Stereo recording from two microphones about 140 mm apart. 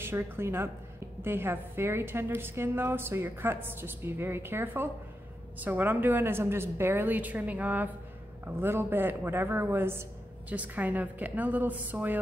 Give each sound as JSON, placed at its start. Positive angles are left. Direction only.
{"t": 0.0, "sound": "a woman's voice", "side_deg": -15}